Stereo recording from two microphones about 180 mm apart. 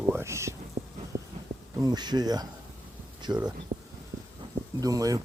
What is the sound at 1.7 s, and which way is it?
Speech, 20° right (ahead or behind).